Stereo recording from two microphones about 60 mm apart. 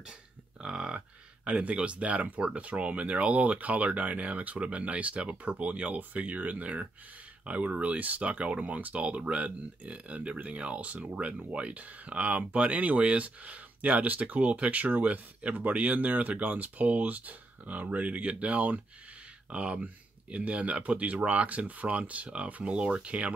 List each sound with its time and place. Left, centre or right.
0.6 s speech: centre